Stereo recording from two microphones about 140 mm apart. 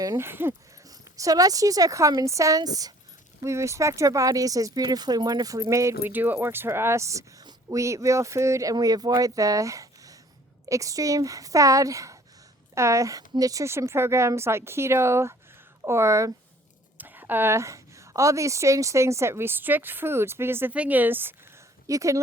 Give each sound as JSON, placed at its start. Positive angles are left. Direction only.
{"t": 0.0, "sound": "a woman's voice", "side_deg": -20}